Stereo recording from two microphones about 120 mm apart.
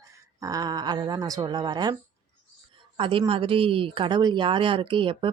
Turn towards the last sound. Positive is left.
turn(degrees=-45)  # may be behind; listen again after turning